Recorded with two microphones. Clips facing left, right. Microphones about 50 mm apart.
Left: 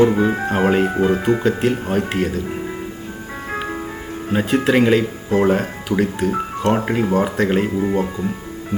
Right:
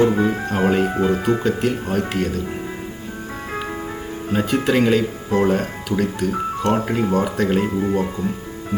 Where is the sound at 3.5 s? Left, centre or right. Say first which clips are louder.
Left 3 dB; centre.